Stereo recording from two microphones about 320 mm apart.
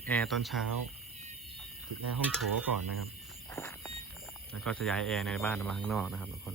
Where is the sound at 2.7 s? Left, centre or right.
Right.